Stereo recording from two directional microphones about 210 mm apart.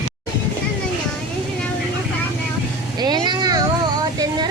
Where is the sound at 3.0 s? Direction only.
20° right (ahead or behind).